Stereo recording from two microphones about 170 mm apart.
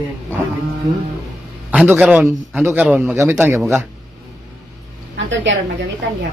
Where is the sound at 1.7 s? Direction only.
10° right (ahead or behind).